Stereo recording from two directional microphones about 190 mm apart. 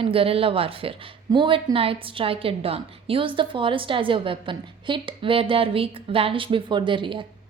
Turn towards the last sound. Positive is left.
turn(degrees=-25)  # may be behind; listen again after turning